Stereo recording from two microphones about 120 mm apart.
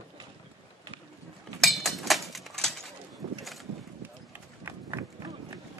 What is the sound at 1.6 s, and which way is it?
Chink, centre (ahead or behind).